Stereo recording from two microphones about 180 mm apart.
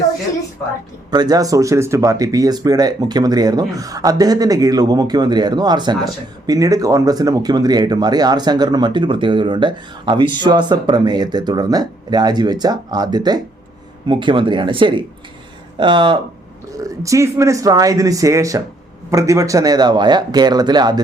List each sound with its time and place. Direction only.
1.1 s speech: 20° right (ahead or behind)